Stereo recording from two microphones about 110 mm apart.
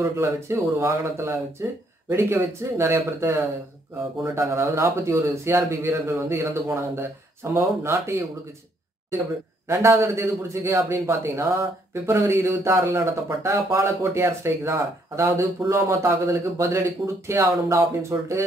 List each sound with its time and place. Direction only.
0.0 s speech: 30° right (ahead or behind)
9.7 s speech: 25° right (ahead or behind)